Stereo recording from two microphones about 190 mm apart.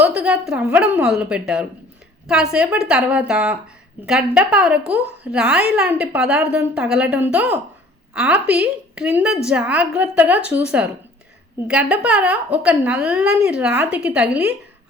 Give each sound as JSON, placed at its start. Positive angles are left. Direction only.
{"t": 0.0, "sound": "a woman's voice", "side_deg": -5}